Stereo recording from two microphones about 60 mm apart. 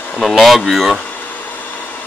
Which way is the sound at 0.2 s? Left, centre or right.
Centre.